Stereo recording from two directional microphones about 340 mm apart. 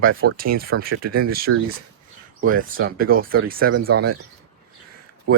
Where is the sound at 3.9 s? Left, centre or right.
Right.